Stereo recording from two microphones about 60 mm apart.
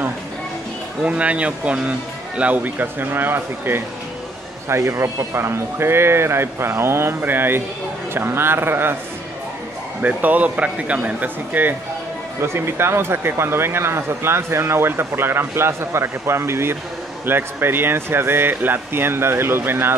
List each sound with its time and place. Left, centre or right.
1.0 s speech: right
4.6 s speech: right
10.0 s speech: right
12.4 s speech: right